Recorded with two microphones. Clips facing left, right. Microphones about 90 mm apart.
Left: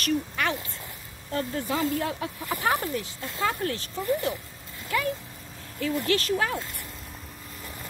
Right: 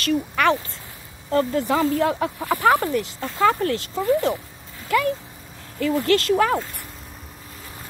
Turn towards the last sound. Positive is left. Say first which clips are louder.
# right 8 dB
turn(degrees=-90)